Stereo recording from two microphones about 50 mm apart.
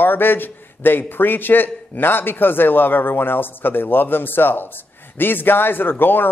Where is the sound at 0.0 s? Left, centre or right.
Left.